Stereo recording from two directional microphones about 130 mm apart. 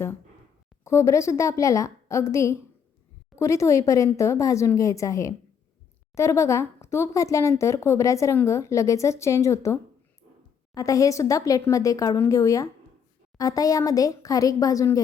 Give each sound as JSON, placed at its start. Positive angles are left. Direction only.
{"t": 0.9, "sound": "speech", "side_deg": 20}